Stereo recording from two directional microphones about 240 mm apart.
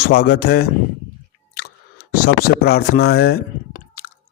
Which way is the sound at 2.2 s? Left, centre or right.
Left.